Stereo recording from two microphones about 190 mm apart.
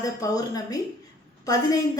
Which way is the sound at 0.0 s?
20° left (ahead or behind).